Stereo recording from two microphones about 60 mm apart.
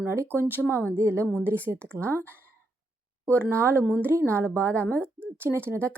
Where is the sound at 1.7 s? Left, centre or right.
Right.